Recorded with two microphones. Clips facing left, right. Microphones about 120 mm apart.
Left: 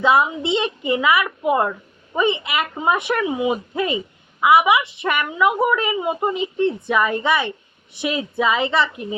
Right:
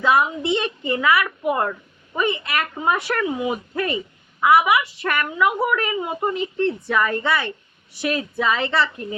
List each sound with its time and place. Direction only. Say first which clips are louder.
0.0 s speech: left 2 dB; 20° left (ahead or behind)